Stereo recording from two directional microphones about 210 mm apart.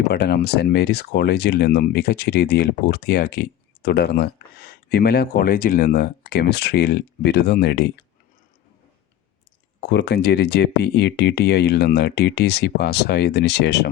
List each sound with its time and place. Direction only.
0.1 s speech: 50° left (ahead or behind)
9.8 s speech: 50° left (ahead or behind)